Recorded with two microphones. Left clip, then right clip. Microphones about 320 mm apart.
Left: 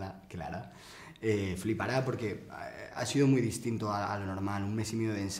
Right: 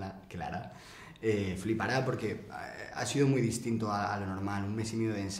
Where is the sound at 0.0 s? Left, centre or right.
Left.